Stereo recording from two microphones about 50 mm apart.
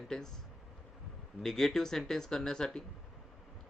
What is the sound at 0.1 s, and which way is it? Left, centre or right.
Speech, centre.